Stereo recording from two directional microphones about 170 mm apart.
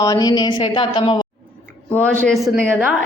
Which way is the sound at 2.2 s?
Centre (ahead or behind).